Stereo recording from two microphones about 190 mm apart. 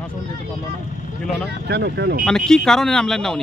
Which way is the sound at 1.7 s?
60° right (ahead or behind).